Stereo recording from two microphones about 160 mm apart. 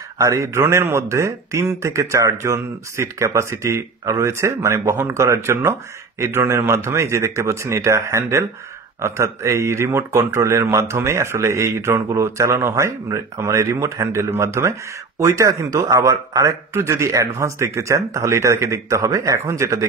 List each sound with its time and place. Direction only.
0.2 s a man's voice: 20° right (ahead or behind)